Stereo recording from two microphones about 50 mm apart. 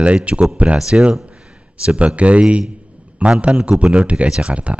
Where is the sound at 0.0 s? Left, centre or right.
Right.